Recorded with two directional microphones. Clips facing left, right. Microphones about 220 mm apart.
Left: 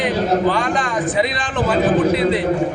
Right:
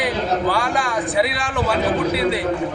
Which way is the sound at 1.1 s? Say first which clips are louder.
Left 1 dB; 5° right (ahead or behind).